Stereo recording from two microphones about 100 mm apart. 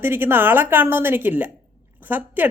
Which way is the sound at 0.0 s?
20° right (ahead or behind).